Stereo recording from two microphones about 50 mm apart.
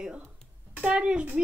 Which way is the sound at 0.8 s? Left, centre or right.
Centre.